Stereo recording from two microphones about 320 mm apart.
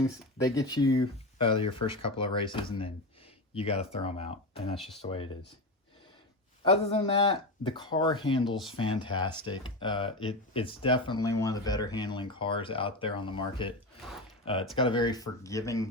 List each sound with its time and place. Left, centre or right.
0.4 s speech: centre
6.7 s speech: centre